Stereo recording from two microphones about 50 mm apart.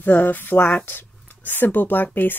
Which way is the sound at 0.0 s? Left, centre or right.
Left.